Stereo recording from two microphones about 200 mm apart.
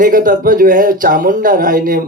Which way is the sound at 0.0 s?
40° right (ahead or behind).